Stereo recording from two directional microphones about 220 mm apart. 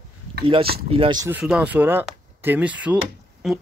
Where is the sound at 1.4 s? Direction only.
5° right (ahead or behind).